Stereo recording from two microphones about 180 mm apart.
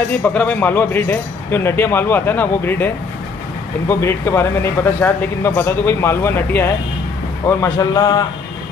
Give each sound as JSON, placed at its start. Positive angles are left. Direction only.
{"t": 0.2, "sound": "a man's voice", "side_deg": 10}
{"t": 3.9, "sound": "a man's voice", "side_deg": 15}